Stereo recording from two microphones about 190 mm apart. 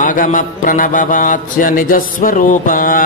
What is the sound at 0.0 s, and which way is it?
Mantra, 45° left (ahead or behind).